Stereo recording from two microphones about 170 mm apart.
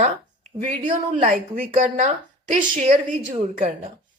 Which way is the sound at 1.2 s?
55° right (ahead or behind).